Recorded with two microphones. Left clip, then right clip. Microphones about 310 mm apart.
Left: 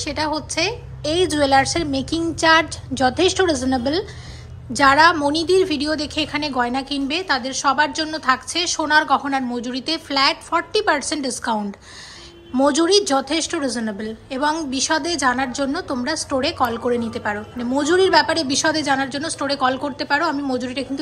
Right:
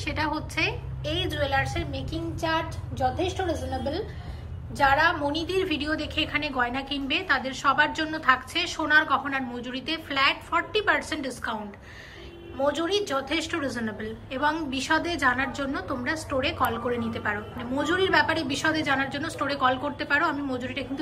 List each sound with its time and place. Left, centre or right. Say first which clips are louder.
0.0 s a woman's voice: left 6 dB; centre
12.6 s a woman's voice: left 9 dB; centre